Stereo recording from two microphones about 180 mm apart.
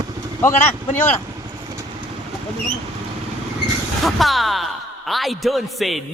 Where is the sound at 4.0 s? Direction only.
Centre (ahead or behind).